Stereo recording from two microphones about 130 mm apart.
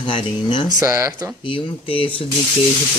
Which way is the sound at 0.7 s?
20° right (ahead or behind).